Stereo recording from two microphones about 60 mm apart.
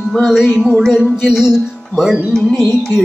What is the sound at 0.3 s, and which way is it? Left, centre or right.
Music, centre.